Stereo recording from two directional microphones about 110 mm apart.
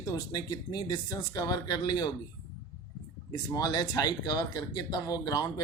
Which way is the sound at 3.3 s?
35° left (ahead or behind).